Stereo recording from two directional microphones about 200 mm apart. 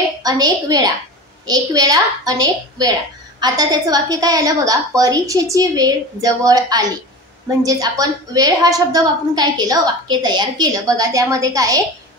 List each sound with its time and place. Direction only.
0.2 s a woman's voice: 20° right (ahead or behind)